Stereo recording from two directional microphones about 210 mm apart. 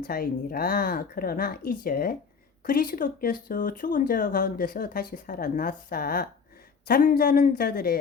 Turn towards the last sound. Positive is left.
turn(degrees=45)  # may be behind; listen again after turning